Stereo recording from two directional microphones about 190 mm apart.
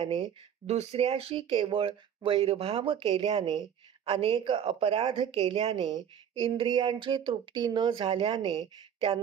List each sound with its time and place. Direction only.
0.0 s speech: 30° right (ahead or behind)